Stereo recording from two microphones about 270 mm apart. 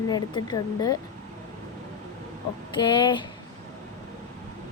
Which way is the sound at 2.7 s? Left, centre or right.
Centre.